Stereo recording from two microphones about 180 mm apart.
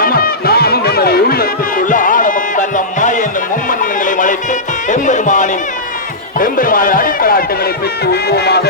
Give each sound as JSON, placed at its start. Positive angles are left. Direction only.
{"t": 0.0, "sound": "music", "side_deg": 55}
{"t": 6.4, "sound": "speech", "side_deg": 50}